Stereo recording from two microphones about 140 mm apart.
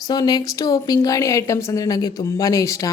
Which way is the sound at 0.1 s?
30° left (ahead or behind).